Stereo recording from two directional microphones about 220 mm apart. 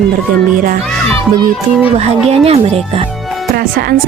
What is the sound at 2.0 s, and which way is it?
Speech, 30° right (ahead or behind).